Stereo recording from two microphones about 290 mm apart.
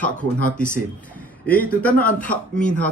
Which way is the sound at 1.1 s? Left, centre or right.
Centre.